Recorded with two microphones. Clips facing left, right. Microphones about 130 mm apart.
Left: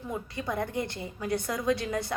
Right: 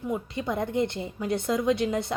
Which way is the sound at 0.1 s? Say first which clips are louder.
Right 3 dB; 20° right (ahead or behind).